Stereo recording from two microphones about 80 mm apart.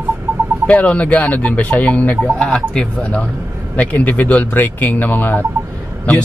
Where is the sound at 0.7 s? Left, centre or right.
Centre.